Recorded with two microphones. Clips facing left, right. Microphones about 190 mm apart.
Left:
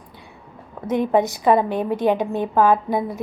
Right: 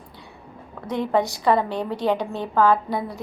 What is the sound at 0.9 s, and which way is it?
A woman's voice, 15° left (ahead or behind).